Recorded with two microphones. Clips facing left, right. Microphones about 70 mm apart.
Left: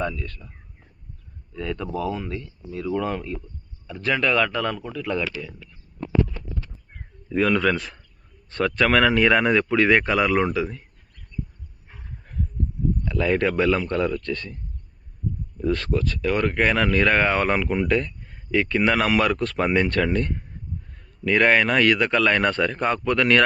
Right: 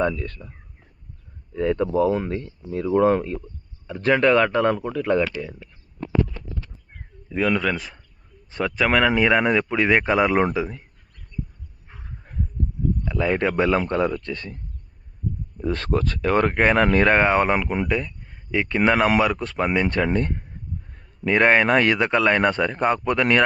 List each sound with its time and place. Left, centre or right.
0.0 s speech: right
1.5 s speech: right
7.3 s a man's voice: centre; by 10.8 s right
13.1 s speech: centre
15.5 s speech: right; by 18.7 s centre
18.9 s speech: right
19.2 s speech: centre
20.1 s speech: right